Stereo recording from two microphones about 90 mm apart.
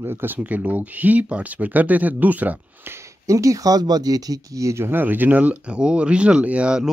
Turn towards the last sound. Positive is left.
turn(degrees=-10)  # may be behind; listen again after turning